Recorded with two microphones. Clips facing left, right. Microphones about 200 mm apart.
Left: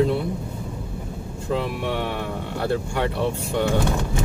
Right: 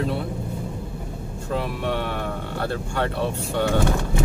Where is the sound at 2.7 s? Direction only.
15° left (ahead or behind).